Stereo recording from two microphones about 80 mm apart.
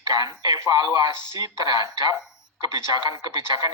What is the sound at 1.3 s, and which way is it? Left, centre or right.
Speech, right.